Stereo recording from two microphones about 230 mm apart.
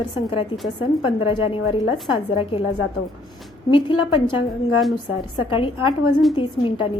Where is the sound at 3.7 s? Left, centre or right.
Left.